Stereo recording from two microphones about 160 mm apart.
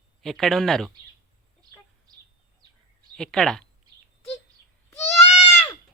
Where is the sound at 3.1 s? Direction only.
5° left (ahead or behind).